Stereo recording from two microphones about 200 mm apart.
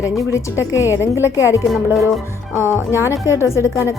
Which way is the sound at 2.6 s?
10° right (ahead or behind).